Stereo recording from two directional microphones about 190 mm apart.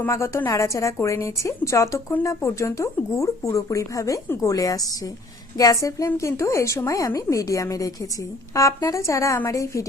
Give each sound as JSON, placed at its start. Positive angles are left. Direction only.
{"t": 0.0, "sound": "a woman's voice", "side_deg": 15}